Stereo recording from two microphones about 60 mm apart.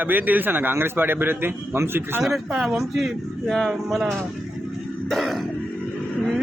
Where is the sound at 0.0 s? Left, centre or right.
Right.